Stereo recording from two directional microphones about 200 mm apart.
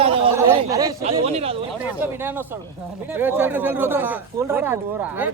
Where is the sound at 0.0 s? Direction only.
25° right (ahead or behind).